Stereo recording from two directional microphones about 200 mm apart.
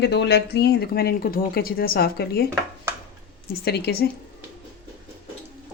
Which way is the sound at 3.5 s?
55° left (ahead or behind).